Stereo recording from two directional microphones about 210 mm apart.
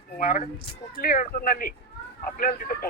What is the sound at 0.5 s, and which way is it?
Speech, 25° left (ahead or behind).